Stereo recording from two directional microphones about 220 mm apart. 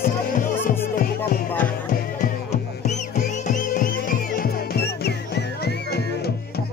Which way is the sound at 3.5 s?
40° left (ahead or behind).